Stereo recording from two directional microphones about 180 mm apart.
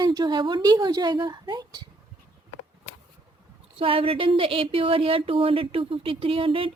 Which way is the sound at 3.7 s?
30° right (ahead or behind).